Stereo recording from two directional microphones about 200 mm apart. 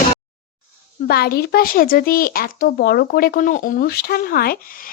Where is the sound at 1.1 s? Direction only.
50° left (ahead or behind).